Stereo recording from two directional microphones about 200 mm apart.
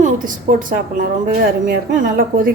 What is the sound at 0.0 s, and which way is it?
Speech, 40° right (ahead or behind).